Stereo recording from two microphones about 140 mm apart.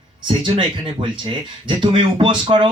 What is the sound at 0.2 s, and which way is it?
A man's voice, 35° right (ahead or behind).